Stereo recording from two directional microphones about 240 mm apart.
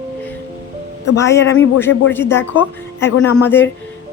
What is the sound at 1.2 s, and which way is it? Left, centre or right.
A woman's voice, centre.